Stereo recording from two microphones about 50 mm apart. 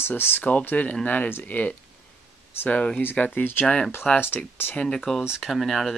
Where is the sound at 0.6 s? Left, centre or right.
Left.